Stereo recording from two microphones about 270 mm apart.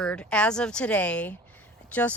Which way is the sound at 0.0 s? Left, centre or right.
Centre.